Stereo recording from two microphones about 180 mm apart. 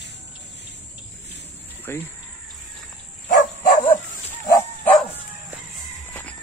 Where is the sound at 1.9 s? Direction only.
15° left (ahead or behind).